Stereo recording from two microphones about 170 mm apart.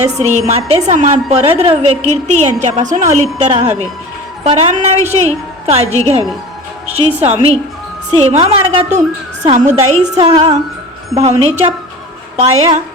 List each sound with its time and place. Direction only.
0.0 s a woman's voice: 40° right (ahead or behind)
9.4 s a woman's voice: 45° right (ahead or behind)